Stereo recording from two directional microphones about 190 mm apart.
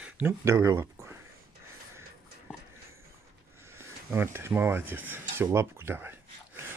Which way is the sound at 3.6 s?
15° right (ahead or behind).